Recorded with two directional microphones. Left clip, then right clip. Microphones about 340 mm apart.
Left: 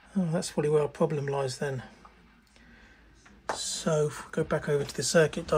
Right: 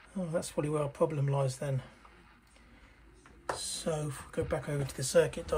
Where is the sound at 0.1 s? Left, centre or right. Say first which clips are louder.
Left 3 dB; left.